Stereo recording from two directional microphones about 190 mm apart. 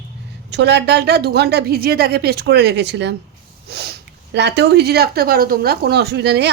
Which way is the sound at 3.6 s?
60° right (ahead or behind).